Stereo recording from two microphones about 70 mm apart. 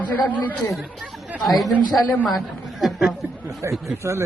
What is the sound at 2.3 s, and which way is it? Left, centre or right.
A woman's voice, centre.